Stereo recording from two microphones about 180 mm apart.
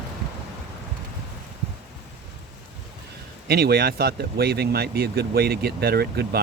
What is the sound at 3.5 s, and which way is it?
Speech, 60° right (ahead or behind).